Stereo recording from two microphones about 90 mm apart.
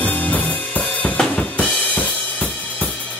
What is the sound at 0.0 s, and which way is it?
Drum kit, 20° left (ahead or behind).